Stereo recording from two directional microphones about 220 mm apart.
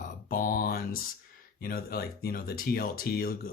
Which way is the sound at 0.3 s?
40° left (ahead or behind).